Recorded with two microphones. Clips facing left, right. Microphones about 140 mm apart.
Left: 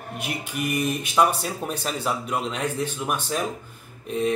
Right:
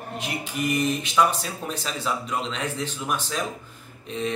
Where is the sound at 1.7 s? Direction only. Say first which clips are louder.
Even; 10° left (ahead or behind).